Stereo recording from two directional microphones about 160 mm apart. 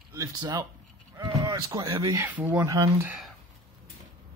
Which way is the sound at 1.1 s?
20° right (ahead or behind).